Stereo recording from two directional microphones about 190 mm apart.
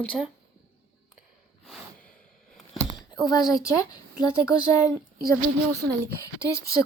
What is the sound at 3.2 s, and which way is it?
Speech, 20° left (ahead or behind).